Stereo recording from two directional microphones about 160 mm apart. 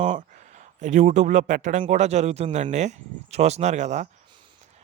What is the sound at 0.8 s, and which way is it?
A man's voice, 50° right (ahead or behind).